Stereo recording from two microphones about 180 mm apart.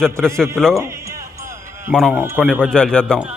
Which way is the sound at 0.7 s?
15° right (ahead or behind).